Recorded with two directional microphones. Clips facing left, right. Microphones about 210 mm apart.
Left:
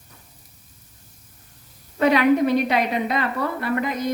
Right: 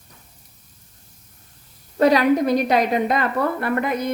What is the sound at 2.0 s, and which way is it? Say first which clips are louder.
A woman's voice: right 1 dB; 40° right (ahead or behind).